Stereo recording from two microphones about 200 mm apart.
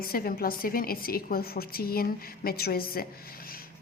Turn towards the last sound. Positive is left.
turn(degrees=50)  # may be behind; listen again after turning